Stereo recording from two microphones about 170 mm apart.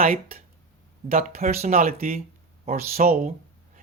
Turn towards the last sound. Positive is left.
turn(degrees=-50)  # may be behind; listen again after turning